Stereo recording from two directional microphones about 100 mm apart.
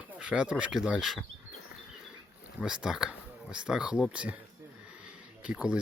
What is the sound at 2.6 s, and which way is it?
Speech, 5° right (ahead or behind).